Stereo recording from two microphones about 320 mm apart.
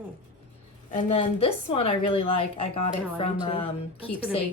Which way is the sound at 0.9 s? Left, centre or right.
Centre.